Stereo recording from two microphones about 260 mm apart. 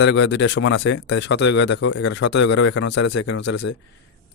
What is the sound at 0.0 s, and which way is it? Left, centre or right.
A man's voice, left.